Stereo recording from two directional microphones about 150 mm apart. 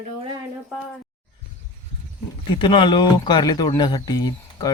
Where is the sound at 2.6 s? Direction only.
30° left (ahead or behind).